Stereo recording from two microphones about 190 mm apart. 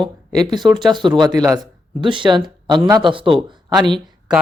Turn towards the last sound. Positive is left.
turn(degrees=-25)  # may be behind; listen again after turning